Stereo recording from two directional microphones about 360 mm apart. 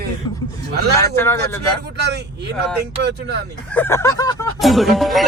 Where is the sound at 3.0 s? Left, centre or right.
Right.